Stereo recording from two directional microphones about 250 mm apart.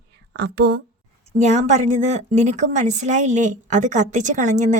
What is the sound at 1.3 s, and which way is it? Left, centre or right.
A woman's voice, right.